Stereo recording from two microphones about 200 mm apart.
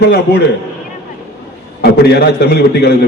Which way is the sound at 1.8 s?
55° left (ahead or behind).